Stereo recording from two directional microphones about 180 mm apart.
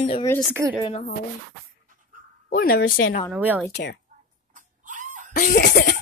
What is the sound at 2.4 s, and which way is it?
Speech, 50° left (ahead or behind).